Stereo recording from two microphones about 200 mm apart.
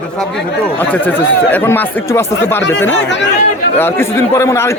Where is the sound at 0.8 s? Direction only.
10° left (ahead or behind).